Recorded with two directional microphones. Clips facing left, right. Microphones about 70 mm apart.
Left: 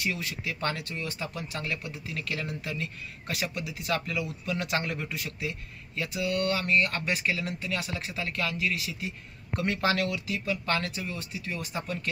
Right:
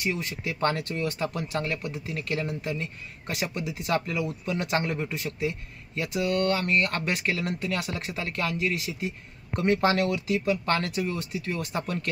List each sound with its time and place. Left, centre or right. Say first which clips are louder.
0.0 s speech: right 2 dB; right
10.0 s speech: right 5 dB; right